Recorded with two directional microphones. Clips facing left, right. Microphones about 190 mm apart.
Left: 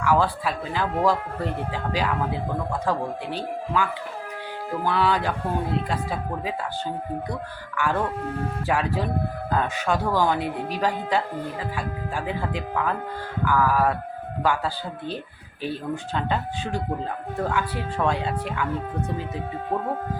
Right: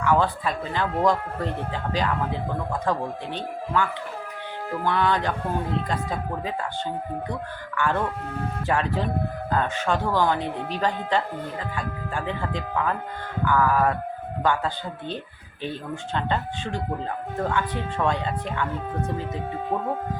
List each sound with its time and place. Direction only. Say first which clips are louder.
0.0 s speech: even; 5° left (ahead or behind)
7.8 s speech: even; 5° left (ahead or behind)